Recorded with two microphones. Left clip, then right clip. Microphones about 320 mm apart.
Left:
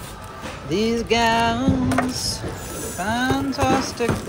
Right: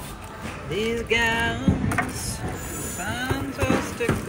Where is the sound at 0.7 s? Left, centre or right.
Centre.